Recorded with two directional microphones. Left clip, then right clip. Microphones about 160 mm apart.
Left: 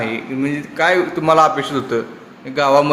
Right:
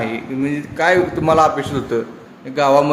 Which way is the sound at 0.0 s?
20° right (ahead or behind).